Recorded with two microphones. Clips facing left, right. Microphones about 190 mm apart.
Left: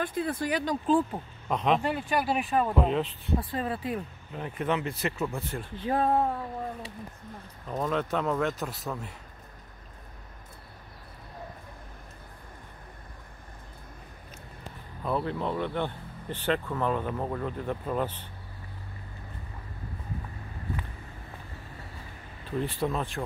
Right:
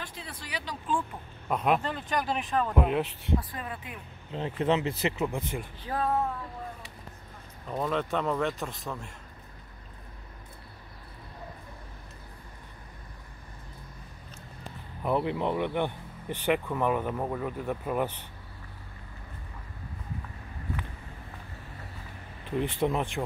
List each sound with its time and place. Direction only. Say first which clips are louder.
0.0 s speech: left 13 dB; 50° left (ahead or behind)
1.5 s speech: even; 5° right (ahead or behind)
1.8 s speech: left 3 dB; 10° left (ahead or behind)
2.8 s speech: left 1 dB; 10° right (ahead or behind)
3.3 s speech: left 3 dB; 30° left (ahead or behind)
4.3 s speech: right 3 dB; 25° right (ahead or behind)
5.9 s speech: left 4 dB; 25° left (ahead or behind)
7.6 s speech: even; centre (ahead or behind)
15.0 s speech: right 2 dB; 15° right (ahead or behind)
22.6 s speech: right 2 dB; 20° right (ahead or behind)